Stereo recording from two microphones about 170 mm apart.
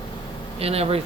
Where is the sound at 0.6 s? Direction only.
35° right (ahead or behind).